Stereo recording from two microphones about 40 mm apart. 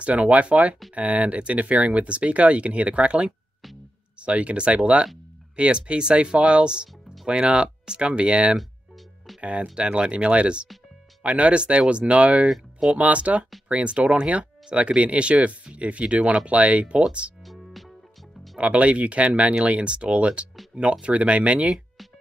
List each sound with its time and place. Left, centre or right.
0.0 s speech: right
18.6 s speech: right